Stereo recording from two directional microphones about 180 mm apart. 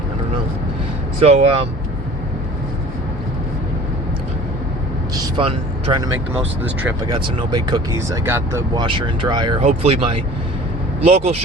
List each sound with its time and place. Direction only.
1.2 s speech: 35° right (ahead or behind)
5.1 s speech: 20° right (ahead or behind)
7.1 s speech: 25° right (ahead or behind)
9.6 s speech: 35° right (ahead or behind)